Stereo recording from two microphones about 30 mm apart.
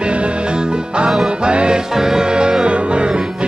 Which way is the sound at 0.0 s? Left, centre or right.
Right.